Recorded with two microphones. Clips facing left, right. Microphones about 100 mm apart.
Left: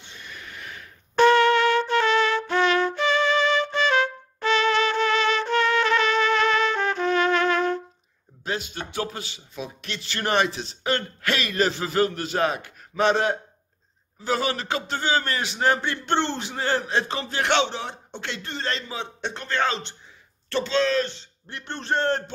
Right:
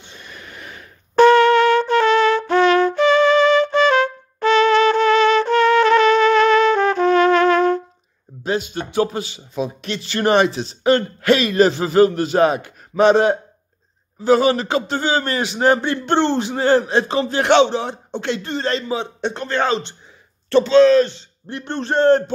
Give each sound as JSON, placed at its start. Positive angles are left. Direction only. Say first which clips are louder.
{"t": 0.3, "sound": "a sound", "louder": "right 2 dB", "side_deg": -35}
{"t": 1.1, "sound": "music", "louder": "right 6 dB", "side_deg": -60}
{"t": 8.5, "sound": "a man's voice", "louder": "right 8 dB", "side_deg": -15}
{"t": 20.4, "sound": "a man's voice", "louder": "right 12 dB", "side_deg": -15}